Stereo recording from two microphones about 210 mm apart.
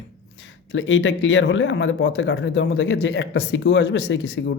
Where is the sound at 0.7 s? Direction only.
60° left (ahead or behind).